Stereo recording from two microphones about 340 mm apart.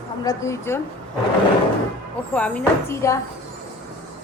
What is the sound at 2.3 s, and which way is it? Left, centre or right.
Speech, centre.